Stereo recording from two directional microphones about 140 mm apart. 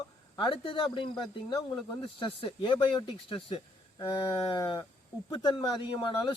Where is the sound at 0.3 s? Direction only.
40° left (ahead or behind).